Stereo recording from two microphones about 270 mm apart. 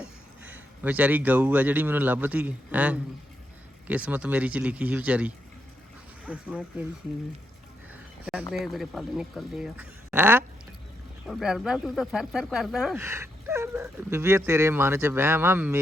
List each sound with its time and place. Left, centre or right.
0.0 s speech: centre
8.2 s a sound: centre
8.5 s speech: centre